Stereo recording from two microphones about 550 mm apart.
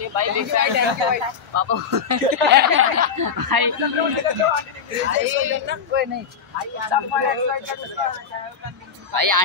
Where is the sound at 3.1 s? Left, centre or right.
Right.